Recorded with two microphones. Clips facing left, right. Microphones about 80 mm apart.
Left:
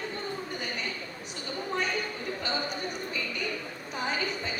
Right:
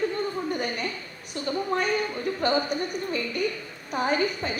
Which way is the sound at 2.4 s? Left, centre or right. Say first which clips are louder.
Right 9 dB; right.